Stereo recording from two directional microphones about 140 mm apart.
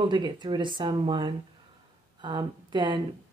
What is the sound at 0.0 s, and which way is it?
Speech, 30° right (ahead or behind).